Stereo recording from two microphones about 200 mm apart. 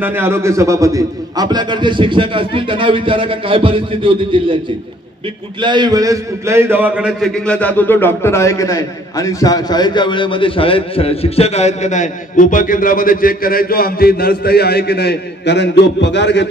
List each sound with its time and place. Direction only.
0.0 s a man's voice: 10° right (ahead or behind)
5.6 s a man's voice: 20° right (ahead or behind); by 16.4 s 60° left (ahead or behind)